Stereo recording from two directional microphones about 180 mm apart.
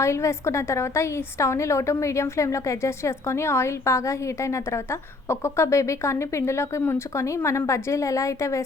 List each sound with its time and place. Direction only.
0.0 s a woman's voice: 15° left (ahead or behind)